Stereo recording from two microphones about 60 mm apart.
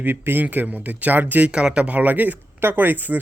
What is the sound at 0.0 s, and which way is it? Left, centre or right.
A man's voice, right.